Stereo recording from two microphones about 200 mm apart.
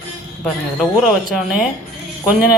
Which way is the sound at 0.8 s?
Centre (ahead or behind).